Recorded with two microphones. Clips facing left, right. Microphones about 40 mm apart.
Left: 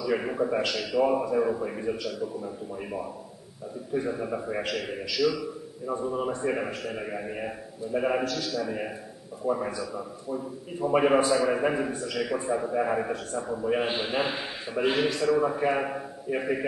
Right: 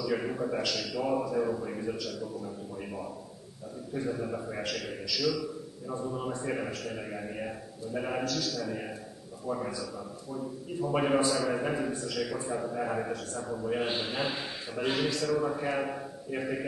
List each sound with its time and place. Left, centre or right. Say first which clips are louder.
0.0 s a man's voice: left 4 dB; left